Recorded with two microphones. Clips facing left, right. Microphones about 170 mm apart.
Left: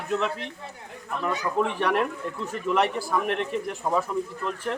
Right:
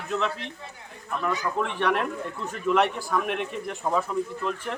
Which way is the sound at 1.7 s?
5° left (ahead or behind).